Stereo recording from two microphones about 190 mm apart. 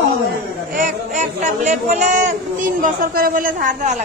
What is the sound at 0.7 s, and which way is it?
A man's voice, 40° right (ahead or behind).